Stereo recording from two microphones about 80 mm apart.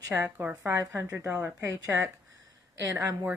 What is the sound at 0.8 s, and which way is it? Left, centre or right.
Speech, right.